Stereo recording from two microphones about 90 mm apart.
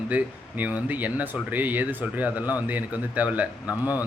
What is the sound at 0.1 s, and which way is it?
A man's voice, 15° right (ahead or behind).